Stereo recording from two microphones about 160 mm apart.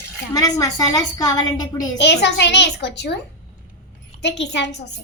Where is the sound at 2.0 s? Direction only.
90° left.